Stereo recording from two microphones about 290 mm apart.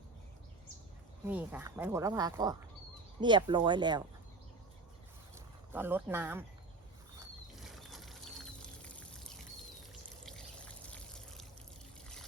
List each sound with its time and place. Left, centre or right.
1.3 s speech: centre
5.7 s speech: centre
7.5 s pour: centre
10.2 s trickle: centre